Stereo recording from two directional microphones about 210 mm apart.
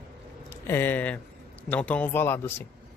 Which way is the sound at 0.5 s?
10° left (ahead or behind).